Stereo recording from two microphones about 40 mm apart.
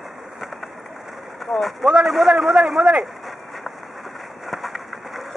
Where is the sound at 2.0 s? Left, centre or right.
Centre.